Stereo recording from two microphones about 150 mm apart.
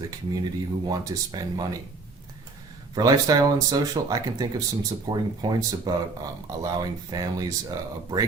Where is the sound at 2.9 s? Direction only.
25° right (ahead or behind).